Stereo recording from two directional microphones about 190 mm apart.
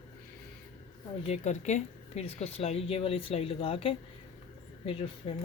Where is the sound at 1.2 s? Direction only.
35° left (ahead or behind).